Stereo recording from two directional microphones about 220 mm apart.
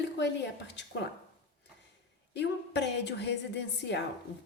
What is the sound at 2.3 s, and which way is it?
Speech, 50° left (ahead or behind).